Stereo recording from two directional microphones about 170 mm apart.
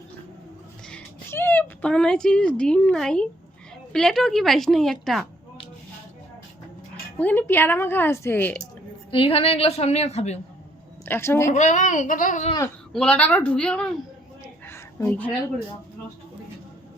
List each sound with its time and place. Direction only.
0.9 s a woman's voice: 10° left (ahead or behind)
7.2 s a woman's voice: 10° left (ahead or behind)
9.1 s a woman's voice: 35° left (ahead or behind)
11.0 s a woman's voice: 15° left (ahead or behind)
11.4 s a child's voice: 45° left (ahead or behind)
12.9 s a woman's voice: 5° left (ahead or behind)
14.4 s a sound: 15° left (ahead or behind)